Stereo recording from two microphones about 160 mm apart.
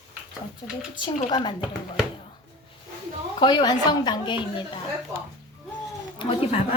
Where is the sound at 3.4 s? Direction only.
30° left (ahead or behind).